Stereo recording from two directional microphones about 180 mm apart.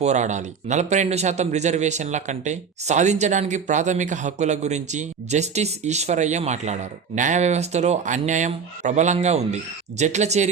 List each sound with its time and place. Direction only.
0.0 s a man's voice: 40° right (ahead or behind)